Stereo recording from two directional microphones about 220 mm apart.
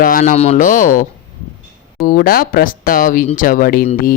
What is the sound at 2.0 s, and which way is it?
Mantra, 40° left (ahead or behind).